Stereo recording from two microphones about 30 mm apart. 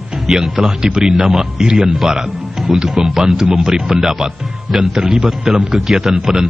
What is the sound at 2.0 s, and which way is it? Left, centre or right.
A man's voice, centre.